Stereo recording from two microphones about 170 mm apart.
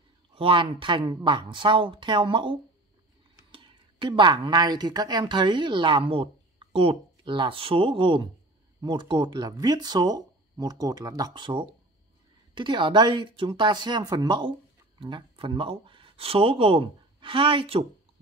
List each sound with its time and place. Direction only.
0.3 s speech: 30° right (ahead or behind)